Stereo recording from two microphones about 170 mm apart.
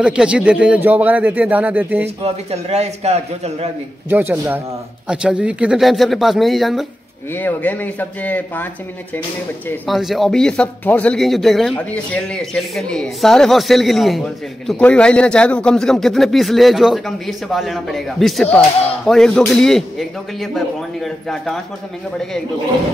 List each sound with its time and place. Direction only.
0.0 s speech: 5° right (ahead or behind)
2.0 s a man's voice: 40° right (ahead or behind)
4.1 s speech: 10° right (ahead or behind)
7.3 s speech: 10° left (ahead or behind)
9.8 s speech: centre (ahead or behind)